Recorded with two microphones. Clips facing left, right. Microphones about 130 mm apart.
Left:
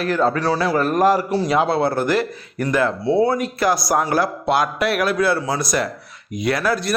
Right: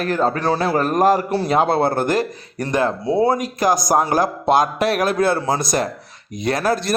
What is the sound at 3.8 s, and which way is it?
A man's voice, 35° right (ahead or behind).